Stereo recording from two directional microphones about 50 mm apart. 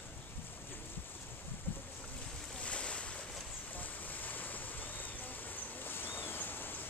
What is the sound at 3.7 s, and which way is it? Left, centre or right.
Boat, left.